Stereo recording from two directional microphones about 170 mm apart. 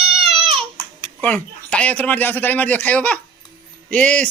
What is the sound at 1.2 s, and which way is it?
A man's voice, 10° left (ahead or behind).